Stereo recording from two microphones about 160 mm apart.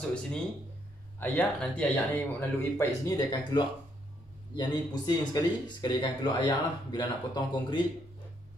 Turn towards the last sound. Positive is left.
turn(degrees=30)  # may be behind; listen again after turning